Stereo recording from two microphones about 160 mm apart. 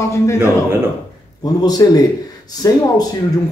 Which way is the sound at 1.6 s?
25° left (ahead or behind).